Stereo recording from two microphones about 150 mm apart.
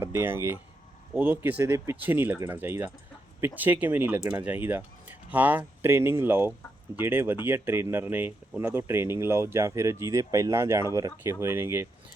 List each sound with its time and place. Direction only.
0.0 s speech: 15° right (ahead or behind)